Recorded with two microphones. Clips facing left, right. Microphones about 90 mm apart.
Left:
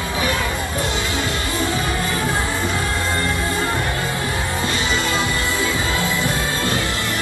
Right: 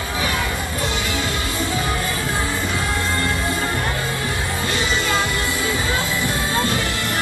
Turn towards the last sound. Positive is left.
turn(degrees=-20)  # may be behind; listen again after turning